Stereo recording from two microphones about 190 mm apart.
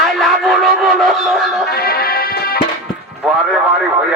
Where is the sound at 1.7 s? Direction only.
55° left (ahead or behind).